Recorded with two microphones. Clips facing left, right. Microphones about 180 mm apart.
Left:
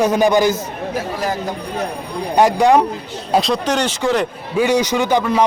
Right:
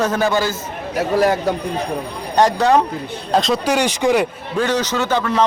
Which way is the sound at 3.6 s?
10° right (ahead or behind).